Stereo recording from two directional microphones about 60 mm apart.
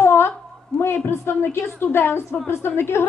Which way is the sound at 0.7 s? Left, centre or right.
Left.